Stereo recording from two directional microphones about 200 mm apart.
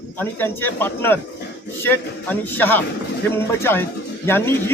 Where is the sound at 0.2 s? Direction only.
10° left (ahead or behind).